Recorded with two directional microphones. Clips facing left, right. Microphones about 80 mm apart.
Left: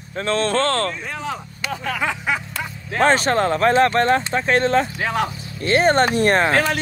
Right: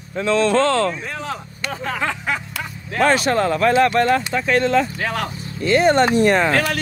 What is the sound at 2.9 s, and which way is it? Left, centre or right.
Speech, left.